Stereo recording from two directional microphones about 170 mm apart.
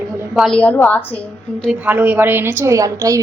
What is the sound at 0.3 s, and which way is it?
Speech, 5° left (ahead or behind).